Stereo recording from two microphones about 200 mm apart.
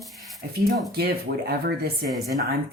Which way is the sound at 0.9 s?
50° right (ahead or behind).